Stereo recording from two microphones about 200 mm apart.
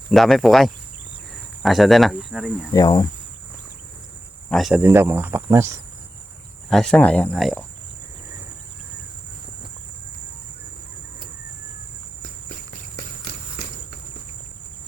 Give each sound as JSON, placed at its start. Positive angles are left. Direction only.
{"t": 0.1, "sound": "speech", "side_deg": 0}
{"t": 2.7, "sound": "cricket", "side_deg": 20}
{"t": 4.4, "sound": "speech", "side_deg": 0}
{"t": 6.7, "sound": "speech", "side_deg": 5}